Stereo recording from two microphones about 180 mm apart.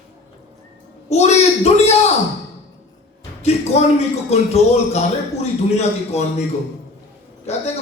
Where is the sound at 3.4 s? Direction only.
35° left (ahead or behind).